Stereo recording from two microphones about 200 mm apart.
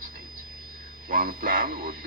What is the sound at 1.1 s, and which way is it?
Speech, 45° right (ahead or behind).